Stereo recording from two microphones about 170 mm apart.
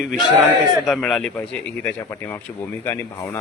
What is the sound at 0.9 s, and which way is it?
A man's voice, 5° left (ahead or behind).